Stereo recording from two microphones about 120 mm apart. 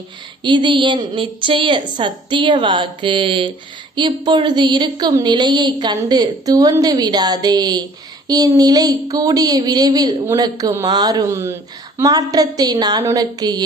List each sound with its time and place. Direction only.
0.4 s a woman's voice: 40° right (ahead or behind)